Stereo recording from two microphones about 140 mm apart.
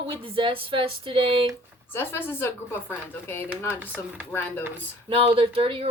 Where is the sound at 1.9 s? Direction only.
15° left (ahead or behind).